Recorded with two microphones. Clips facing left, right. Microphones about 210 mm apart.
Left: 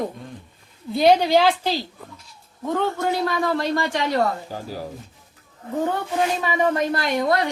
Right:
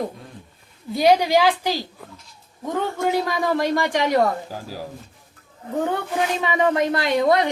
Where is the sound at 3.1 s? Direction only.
15° right (ahead or behind).